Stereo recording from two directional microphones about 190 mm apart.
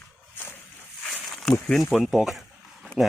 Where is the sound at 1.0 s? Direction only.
5° left (ahead or behind).